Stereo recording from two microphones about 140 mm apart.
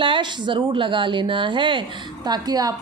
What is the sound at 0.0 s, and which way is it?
A woman's voice, 35° right (ahead or behind).